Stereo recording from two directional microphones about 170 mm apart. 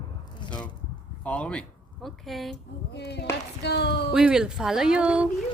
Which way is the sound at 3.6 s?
80° left.